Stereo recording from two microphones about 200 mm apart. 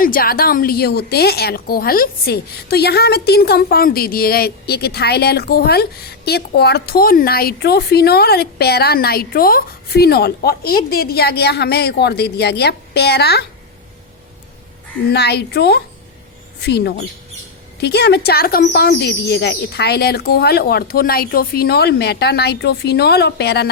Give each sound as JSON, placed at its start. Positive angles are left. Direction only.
{"t": 0.0, "sound": "a woman's voice", "side_deg": 45}
{"t": 15.1, "sound": "a woman's voice", "side_deg": 55}